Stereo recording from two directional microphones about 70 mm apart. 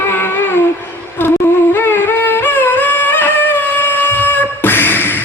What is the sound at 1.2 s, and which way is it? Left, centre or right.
Music, left.